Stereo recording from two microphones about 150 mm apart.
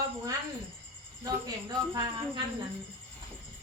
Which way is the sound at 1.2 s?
25° right (ahead or behind).